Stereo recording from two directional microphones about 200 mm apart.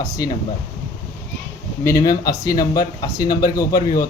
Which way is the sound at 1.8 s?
15° left (ahead or behind).